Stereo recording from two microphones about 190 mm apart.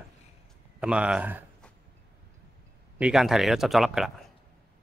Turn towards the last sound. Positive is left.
turn(degrees=0)  # may be behind; listen again after turning